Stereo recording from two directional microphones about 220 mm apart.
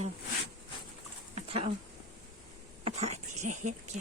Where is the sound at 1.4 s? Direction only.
25° right (ahead or behind).